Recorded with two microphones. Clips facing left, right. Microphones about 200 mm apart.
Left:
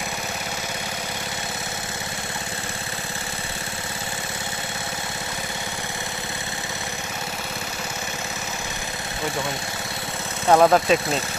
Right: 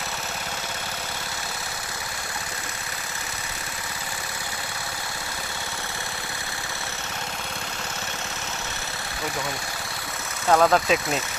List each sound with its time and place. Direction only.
10.5 s speech: 20° left (ahead or behind)
10.8 s speech: 5° right (ahead or behind)